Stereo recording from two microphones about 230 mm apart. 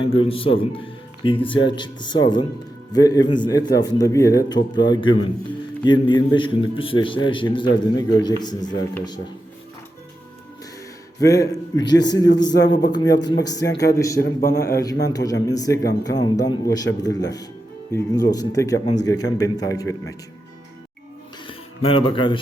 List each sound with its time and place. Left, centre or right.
0.0 s a man's voice: left
11.2 s a man's voice: centre
12.5 s a man's voice: left
12.9 s a man's voice: centre
14.2 s a man's voice: left
14.6 s a man's voice: centre
21.4 s a sound: left